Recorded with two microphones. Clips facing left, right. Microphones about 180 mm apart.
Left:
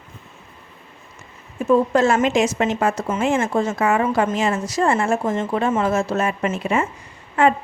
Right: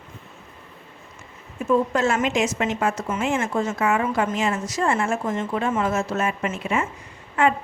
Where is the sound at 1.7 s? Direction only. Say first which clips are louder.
Left 4 dB; 35° left (ahead or behind).